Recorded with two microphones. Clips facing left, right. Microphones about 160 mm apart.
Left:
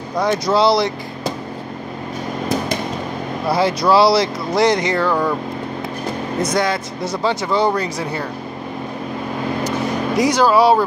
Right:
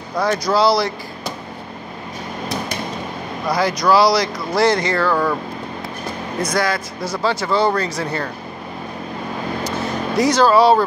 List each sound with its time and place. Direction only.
0.2 s speech: 20° left (ahead or behind)
3.5 s speech: 25° left (ahead or behind)
6.4 s speech: 20° left (ahead or behind)
9.6 s vehicle: 15° left (ahead or behind)